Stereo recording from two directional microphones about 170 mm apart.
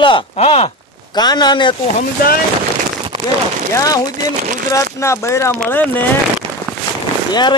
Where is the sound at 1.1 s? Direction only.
25° left (ahead or behind).